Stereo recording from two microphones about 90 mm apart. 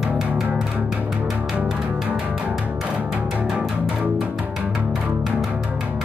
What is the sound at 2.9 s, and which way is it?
Music, 15° right (ahead or behind).